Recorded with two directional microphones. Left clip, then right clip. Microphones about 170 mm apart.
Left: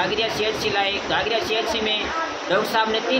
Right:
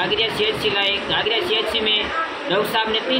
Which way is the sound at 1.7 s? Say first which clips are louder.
Right 4 dB; 60° left (ahead or behind).